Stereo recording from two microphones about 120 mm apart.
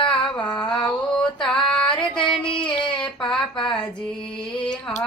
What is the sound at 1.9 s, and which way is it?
Female singing, 40° left (ahead or behind).